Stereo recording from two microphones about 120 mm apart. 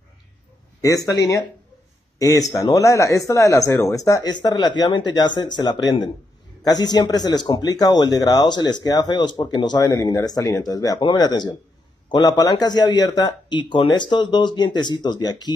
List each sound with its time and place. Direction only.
0.7 s speech: 30° left (ahead or behind)